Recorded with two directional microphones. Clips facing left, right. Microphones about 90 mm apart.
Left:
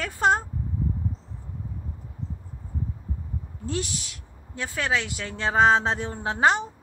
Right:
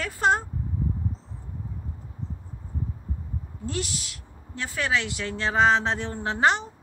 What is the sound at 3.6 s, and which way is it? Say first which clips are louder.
A woman's voice: left 1 dB; 25° left (ahead or behind).